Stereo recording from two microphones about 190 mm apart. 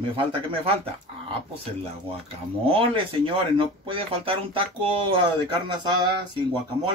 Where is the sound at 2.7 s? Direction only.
30° right (ahead or behind).